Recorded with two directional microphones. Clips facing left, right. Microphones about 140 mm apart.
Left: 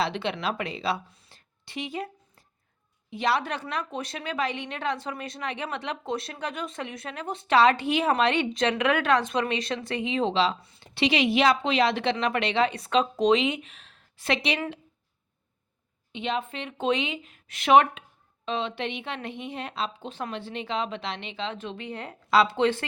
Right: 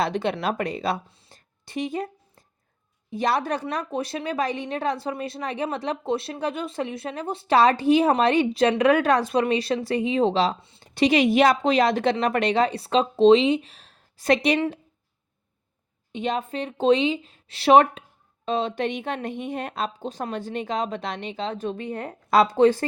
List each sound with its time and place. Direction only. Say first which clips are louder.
0.0 s speech: right 4 dB; 45° right (ahead or behind)
1.3 s a sound: right 6 dB; 45° right (ahead or behind)
3.1 s speech: right 3 dB; 40° right (ahead or behind)
10.6 s speech: right 2 dB; 25° right (ahead or behind)
10.9 s speech: right 5 dB; 45° right (ahead or behind)
16.1 s speech: right 4 dB; 40° right (ahead or behind)